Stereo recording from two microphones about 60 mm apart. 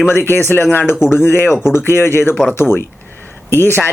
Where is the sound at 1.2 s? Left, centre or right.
Left.